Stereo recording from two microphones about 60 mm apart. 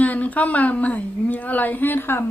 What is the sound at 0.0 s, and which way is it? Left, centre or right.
A woman's voice, left.